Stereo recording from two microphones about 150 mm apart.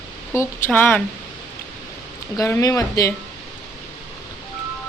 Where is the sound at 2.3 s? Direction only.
20° left (ahead or behind).